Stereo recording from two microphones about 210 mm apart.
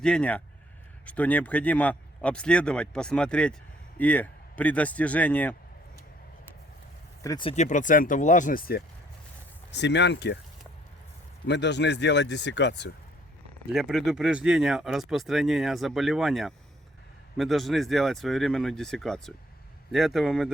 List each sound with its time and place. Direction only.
0.0 s a man's voice: 5° left (ahead or behind)
7.2 s speech: 20° left (ahead or behind)
7.5 s speech: 35° left (ahead or behind)
9.7 s speech: 55° left (ahead or behind)
11.4 s speech: 55° left (ahead or behind)
13.7 s speech: centre (ahead or behind)